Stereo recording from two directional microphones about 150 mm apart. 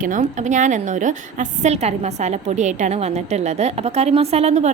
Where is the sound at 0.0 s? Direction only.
60° right (ahead or behind).